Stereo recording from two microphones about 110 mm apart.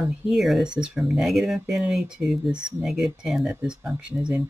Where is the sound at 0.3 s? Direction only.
Centre (ahead or behind).